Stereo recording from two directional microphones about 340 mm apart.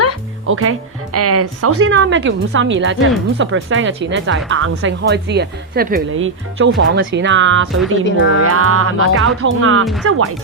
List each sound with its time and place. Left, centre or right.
0.4 s speech: right
8.0 s speech: left
8.4 s speech: right